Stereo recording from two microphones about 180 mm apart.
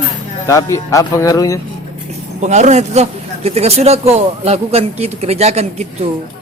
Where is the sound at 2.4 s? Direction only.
40° right (ahead or behind).